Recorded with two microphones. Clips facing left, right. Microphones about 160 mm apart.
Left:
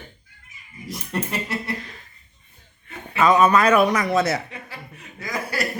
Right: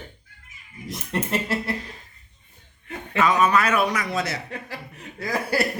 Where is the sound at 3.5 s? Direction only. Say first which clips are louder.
Left 4 dB; 45° left (ahead or behind).